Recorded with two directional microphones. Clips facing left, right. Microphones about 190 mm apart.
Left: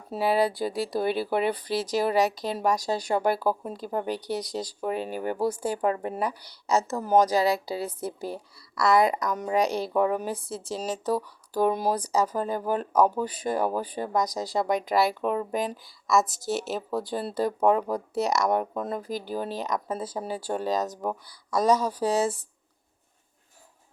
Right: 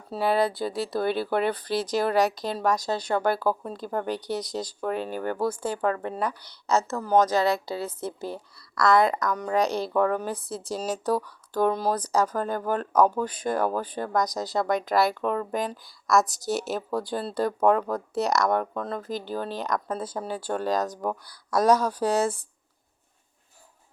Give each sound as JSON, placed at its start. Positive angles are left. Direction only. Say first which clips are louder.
{"t": 0.2, "sound": "speech", "louder": "even", "side_deg": 10}
{"t": 9.3, "sound": "speech", "louder": "even", "side_deg": 20}
{"t": 9.6, "sound": "speech", "louder": "even", "side_deg": 10}
{"t": 11.7, "sound": "speech", "louder": "even", "side_deg": 15}